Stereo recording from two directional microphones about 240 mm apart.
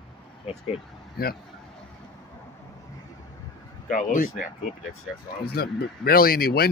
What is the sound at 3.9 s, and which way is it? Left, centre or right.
Speech, left.